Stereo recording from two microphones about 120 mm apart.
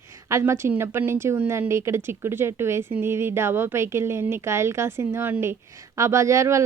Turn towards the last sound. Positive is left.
turn(degrees=-25)  # may be behind; listen again after turning